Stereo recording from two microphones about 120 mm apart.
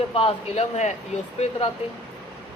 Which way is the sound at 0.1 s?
50° left (ahead or behind).